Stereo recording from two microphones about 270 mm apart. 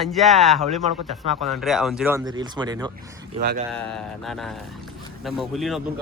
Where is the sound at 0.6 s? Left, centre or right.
Right.